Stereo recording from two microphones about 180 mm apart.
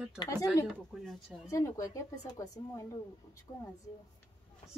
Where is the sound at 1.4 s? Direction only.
15° left (ahead or behind).